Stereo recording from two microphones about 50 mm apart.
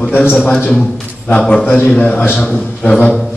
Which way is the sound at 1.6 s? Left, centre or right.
Left.